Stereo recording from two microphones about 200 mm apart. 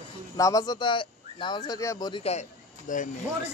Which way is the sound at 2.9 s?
40° left (ahead or behind).